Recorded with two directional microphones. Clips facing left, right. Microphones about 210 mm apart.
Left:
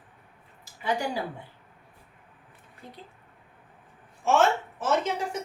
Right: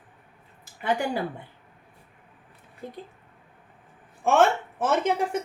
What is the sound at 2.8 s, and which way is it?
Speech, 50° right (ahead or behind).